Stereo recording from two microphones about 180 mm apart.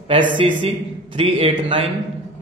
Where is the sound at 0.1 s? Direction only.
30° right (ahead or behind).